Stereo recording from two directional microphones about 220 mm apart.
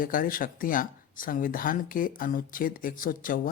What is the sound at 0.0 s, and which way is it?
Speech, 40° left (ahead or behind).